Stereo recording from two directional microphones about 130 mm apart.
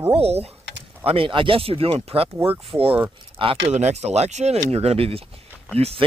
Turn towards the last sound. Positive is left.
turn(degrees=-50)  # may be behind; listen again after turning